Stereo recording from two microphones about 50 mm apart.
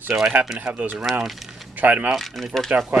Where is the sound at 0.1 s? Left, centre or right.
Right.